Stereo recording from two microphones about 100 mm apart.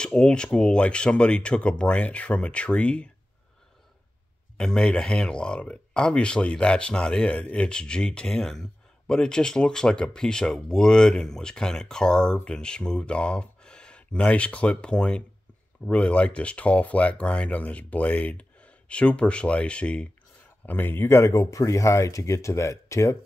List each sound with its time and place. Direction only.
0.0 s speech: 10° left (ahead or behind)
4.6 s speech: 5° left (ahead or behind); by 23.1 s 30° left (ahead or behind)